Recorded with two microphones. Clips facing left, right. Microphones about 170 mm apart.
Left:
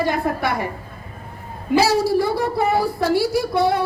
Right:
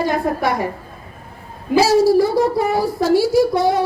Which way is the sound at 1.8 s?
60° left (ahead or behind).